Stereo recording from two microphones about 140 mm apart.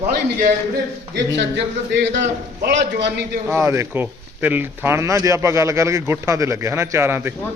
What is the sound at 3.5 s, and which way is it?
Speech, 20° right (ahead or behind).